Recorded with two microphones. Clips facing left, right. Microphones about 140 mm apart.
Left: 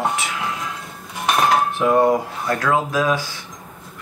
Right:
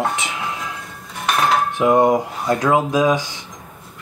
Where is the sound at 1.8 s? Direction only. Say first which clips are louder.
Right 3 dB; 15° right (ahead or behind).